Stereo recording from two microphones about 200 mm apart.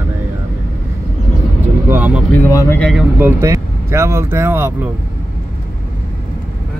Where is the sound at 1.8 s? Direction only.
10° right (ahead or behind).